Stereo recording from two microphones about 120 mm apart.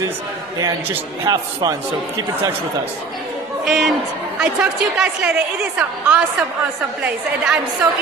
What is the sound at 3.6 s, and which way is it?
A man's voice, centre (ahead or behind).